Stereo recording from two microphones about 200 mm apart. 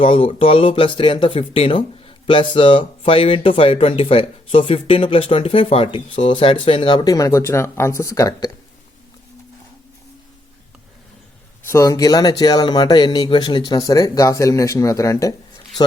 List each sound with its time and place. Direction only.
0.0 s speech: 25° left (ahead or behind)
11.6 s speech: 15° left (ahead or behind)